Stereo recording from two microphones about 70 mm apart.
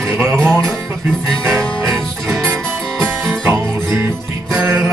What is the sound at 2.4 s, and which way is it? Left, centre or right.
Music, right.